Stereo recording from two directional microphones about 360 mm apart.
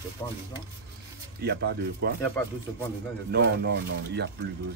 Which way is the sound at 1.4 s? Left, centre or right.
Right.